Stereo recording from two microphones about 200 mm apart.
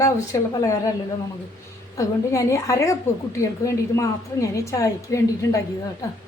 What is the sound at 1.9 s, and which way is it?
A woman's voice, 15° left (ahead or behind).